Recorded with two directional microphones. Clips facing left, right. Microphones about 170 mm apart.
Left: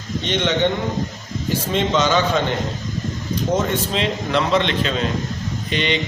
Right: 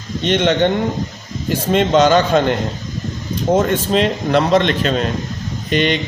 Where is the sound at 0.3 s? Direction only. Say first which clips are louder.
Right 5 dB; 50° right (ahead or behind).